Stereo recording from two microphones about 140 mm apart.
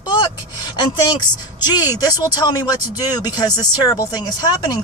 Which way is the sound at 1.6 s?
30° left (ahead or behind).